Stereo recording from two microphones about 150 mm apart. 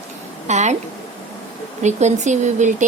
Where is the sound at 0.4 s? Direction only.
50° right (ahead or behind).